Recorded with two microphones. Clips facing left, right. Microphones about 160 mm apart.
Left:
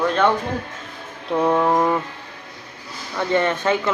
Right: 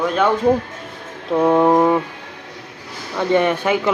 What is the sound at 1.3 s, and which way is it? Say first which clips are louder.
Mantra: right 4 dB; 10° right (ahead or behind).